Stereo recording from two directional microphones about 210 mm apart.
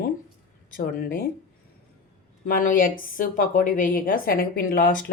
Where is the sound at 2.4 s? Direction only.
40° left (ahead or behind).